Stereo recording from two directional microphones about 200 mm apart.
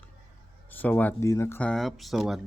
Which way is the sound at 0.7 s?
10° left (ahead or behind).